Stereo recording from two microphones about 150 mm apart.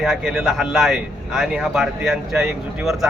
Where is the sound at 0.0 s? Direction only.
Centre (ahead or behind).